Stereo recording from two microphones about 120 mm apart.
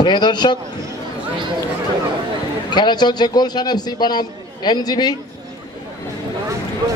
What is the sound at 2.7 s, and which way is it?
A man's voice, 35° left (ahead or behind).